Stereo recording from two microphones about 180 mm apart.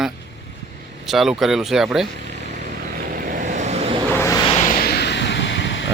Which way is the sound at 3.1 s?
50° right (ahead or behind).